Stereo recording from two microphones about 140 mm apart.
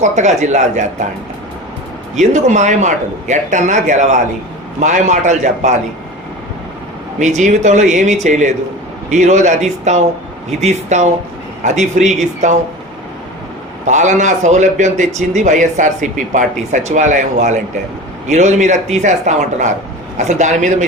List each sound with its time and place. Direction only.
0.0 s a man's voice: 60° right (ahead or behind)
2.1 s a man's voice: 55° right (ahead or behind)
7.2 s a man's voice: 60° right (ahead or behind)
13.8 s a man's voice: 60° right (ahead or behind)